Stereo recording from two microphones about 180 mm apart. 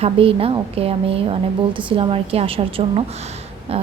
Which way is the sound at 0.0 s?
30° right (ahead or behind).